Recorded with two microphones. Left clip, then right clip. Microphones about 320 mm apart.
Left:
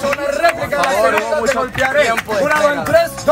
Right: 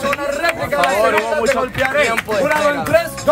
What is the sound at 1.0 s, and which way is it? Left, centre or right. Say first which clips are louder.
Speech: left 1 dB; centre.